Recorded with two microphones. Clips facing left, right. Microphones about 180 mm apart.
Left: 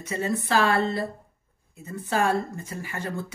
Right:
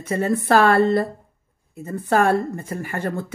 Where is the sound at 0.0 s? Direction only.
55° right (ahead or behind).